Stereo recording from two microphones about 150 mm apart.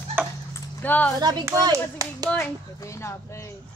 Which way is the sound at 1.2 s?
25° right (ahead or behind).